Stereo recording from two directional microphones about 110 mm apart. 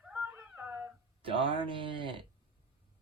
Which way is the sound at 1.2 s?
50° right (ahead or behind).